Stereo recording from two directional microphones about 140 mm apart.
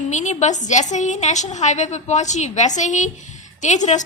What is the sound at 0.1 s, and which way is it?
A woman's voice, 60° left (ahead or behind).